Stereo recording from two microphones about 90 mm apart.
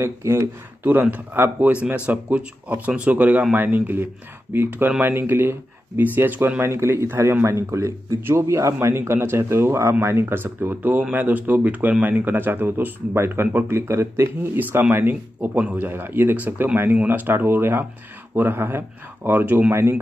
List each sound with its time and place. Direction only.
0.0 s speech: 30° right (ahead or behind)
0.8 s speech: 20° right (ahead or behind)
19.7 s speech: 30° right (ahead or behind)